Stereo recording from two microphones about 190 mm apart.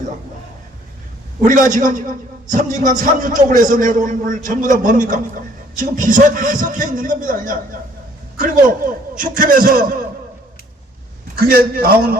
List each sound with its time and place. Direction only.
1.7 s a man's voice: 45° right (ahead or behind)
11.3 s a man's voice: 50° right (ahead or behind)